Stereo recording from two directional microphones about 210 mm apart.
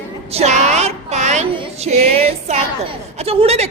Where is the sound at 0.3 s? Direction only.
30° right (ahead or behind).